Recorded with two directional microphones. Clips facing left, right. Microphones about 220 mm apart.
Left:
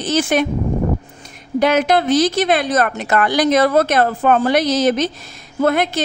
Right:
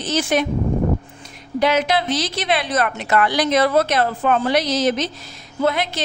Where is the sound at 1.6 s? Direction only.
50° left (ahead or behind).